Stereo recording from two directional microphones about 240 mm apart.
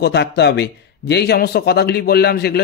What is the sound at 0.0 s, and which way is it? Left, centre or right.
Speech, left.